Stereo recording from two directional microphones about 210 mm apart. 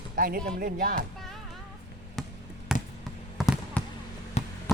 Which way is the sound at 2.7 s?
Centre (ahead or behind).